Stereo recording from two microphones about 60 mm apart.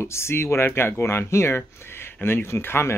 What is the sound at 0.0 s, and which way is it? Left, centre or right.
Speech, left.